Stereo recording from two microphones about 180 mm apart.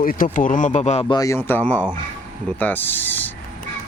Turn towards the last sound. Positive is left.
turn(degrees=10)  # may be behind; listen again after turning